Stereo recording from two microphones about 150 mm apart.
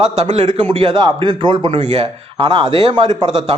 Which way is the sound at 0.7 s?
30° right (ahead or behind).